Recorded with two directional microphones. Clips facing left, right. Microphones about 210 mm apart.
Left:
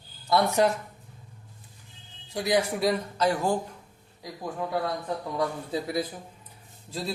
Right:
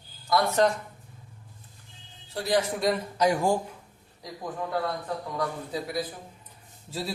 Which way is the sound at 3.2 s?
15° right (ahead or behind).